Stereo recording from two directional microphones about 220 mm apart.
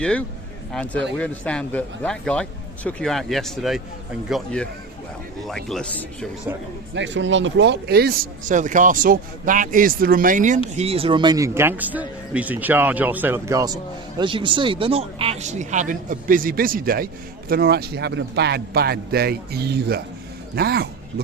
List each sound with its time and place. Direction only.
0.0 s speech: 5° left (ahead or behind)
6.9 s a man's voice: 55° right (ahead or behind)